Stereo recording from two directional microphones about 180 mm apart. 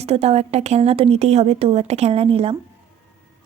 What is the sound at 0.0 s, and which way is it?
A woman's voice, 35° right (ahead or behind).